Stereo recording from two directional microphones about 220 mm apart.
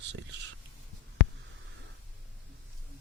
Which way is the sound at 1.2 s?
10° right (ahead or behind).